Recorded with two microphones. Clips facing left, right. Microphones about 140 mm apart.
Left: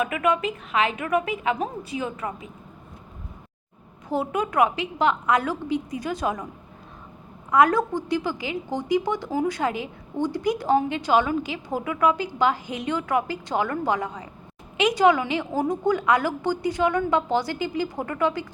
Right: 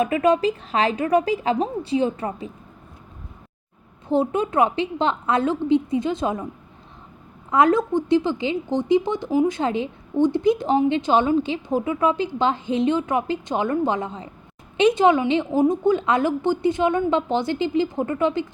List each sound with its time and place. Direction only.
0.0 s a woman's voice: 30° right (ahead or behind)
4.1 s a woman's voice: 25° right (ahead or behind)
7.5 s a woman's voice: 25° right (ahead or behind)